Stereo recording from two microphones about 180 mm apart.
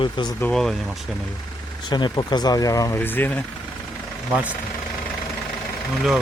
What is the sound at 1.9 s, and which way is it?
Speech, 25° left (ahead or behind).